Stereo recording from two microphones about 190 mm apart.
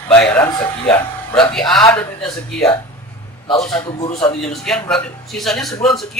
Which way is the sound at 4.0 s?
30° left (ahead or behind).